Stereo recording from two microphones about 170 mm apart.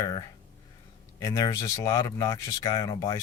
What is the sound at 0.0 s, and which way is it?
Speech, 25° left (ahead or behind).